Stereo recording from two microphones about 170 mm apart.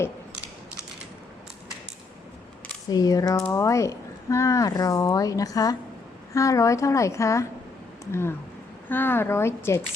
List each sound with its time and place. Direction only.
2.9 s a woman's voice: 20° left (ahead or behind)